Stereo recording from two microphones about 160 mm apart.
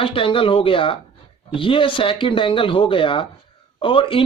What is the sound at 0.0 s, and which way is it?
Speech, 35° left (ahead or behind).